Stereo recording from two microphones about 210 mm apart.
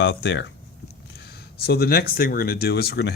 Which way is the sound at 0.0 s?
60° left (ahead or behind).